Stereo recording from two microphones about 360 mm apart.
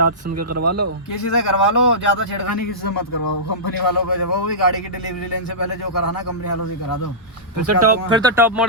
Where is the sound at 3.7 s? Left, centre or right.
Left.